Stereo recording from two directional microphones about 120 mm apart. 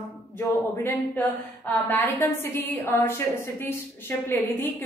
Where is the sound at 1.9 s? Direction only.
20° left (ahead or behind).